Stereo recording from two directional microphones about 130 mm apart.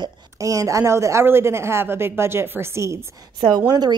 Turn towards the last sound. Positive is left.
turn(degrees=-30)  # may be behind; listen again after turning